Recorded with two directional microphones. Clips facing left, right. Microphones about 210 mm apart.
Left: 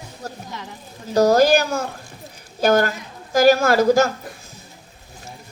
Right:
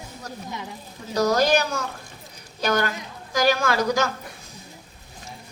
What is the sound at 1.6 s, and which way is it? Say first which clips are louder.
A woman's voice: left 4 dB; 50° left (ahead or behind).